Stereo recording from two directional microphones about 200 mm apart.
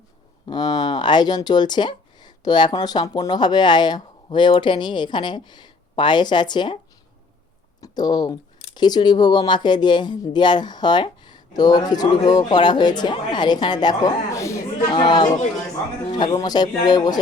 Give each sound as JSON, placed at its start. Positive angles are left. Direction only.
{"t": 0.4, "sound": "speech", "side_deg": 20}
{"t": 7.8, "sound": "speech", "side_deg": 20}